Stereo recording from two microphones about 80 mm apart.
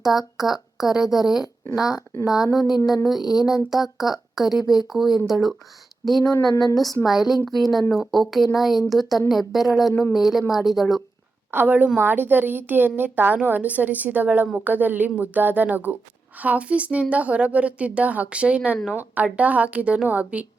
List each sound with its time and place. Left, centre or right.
0.0 s speech: centre
6.2 s a sound: left
7.0 s speech: centre
11.5 s a woman's voice: right